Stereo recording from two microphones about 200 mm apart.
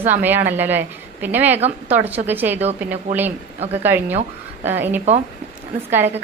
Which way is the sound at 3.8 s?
10° right (ahead or behind).